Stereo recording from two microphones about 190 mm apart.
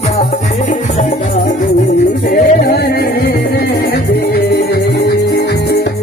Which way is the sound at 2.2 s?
55° left (ahead or behind).